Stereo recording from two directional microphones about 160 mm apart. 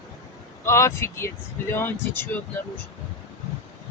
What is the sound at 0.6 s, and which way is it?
Speech, 15° left (ahead or behind).